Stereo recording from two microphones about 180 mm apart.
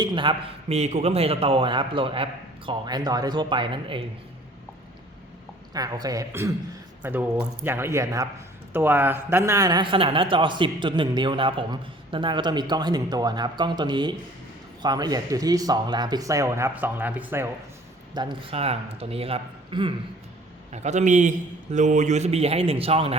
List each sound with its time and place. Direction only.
0.0 s a man's voice: 25° right (ahead or behind)
5.7 s a man's voice: 20° right (ahead or behind)
18.1 s a man's voice: 25° right (ahead or behind)